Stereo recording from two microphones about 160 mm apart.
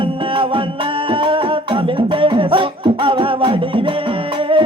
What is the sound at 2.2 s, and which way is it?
Music, 30° right (ahead or behind).